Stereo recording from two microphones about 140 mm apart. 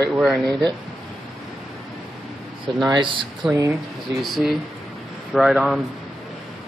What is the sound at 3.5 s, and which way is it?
Speech, 20° right (ahead or behind).